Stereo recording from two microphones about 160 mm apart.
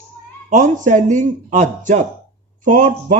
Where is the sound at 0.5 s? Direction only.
50° right (ahead or behind).